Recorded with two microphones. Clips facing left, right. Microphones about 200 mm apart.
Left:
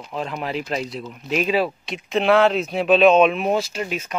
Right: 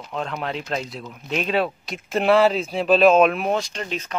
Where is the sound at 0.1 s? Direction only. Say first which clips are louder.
Left 1 dB; 5° left (ahead or behind).